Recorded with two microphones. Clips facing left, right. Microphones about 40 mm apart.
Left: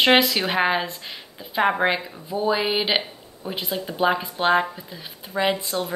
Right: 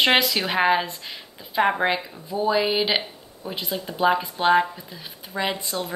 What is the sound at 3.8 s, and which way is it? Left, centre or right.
Speech, centre.